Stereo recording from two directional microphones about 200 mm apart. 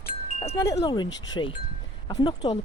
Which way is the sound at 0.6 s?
15° left (ahead or behind).